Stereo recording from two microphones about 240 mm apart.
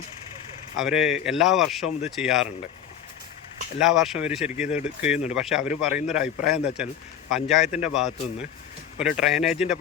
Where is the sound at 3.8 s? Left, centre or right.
Centre.